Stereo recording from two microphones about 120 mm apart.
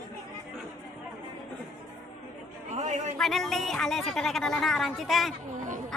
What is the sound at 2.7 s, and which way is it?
Speech, 80° right.